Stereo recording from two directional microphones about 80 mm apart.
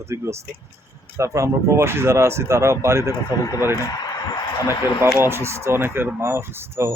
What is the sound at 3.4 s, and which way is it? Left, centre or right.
Speech, left.